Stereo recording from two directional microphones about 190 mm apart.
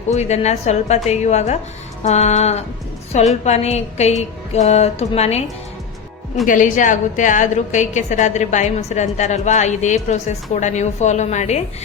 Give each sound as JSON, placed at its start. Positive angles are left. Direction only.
{"t": 0.1, "sound": "a woman's voice", "side_deg": 35}
{"t": 6.5, "sound": "a woman's voice", "side_deg": 45}